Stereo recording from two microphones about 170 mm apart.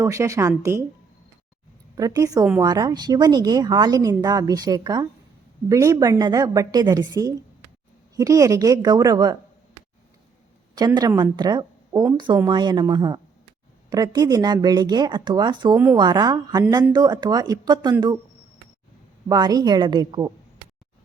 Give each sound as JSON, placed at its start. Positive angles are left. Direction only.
{"t": 0.0, "sound": "speech", "side_deg": -20}
{"t": 2.0, "sound": "speech", "side_deg": -20}
{"t": 10.8, "sound": "speech", "side_deg": -25}
{"t": 19.3, "sound": "speech", "side_deg": -25}